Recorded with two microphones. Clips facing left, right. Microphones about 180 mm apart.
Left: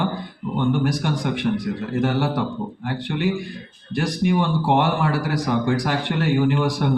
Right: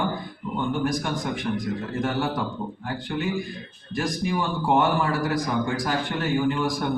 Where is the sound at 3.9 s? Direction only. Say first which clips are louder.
Left 5 dB; 70° left (ahead or behind).